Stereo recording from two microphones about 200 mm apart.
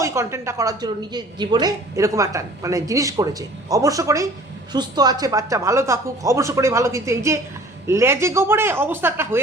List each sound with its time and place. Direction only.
0.0 s a woman's voice: 15° right (ahead or behind)